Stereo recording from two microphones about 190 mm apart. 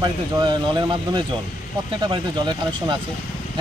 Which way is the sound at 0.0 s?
25° right (ahead or behind).